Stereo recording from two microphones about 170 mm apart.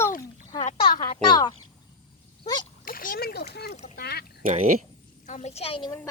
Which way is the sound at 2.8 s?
55° left (ahead or behind).